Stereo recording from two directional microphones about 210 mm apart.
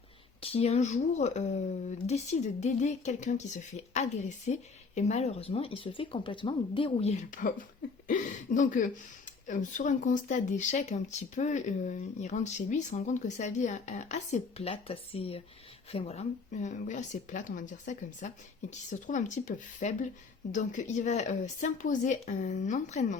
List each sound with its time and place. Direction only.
0.4 s speech: 30° left (ahead or behind)